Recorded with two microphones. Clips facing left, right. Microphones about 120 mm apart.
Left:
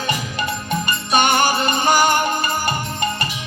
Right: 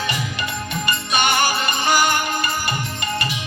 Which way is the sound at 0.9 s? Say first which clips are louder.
Left 3 dB; 40° left (ahead or behind).